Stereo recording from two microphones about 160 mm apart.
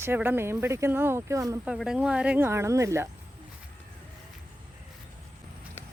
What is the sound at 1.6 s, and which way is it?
Speech, 5° right (ahead or behind).